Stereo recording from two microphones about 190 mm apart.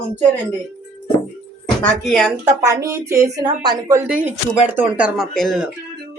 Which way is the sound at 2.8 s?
15° right (ahead or behind).